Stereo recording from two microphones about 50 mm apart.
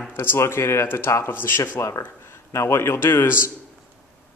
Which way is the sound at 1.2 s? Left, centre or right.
Left.